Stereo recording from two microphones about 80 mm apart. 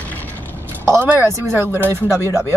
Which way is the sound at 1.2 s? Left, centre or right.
Right.